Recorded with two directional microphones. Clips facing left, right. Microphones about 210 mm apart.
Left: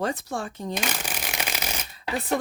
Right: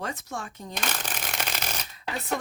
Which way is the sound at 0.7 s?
10° left (ahead or behind).